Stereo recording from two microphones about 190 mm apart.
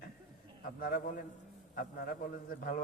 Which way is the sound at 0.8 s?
50° left (ahead or behind).